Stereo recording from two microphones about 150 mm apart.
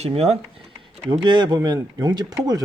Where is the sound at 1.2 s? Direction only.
30° right (ahead or behind).